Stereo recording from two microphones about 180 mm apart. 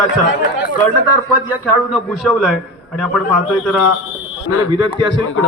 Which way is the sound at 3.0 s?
5° right (ahead or behind).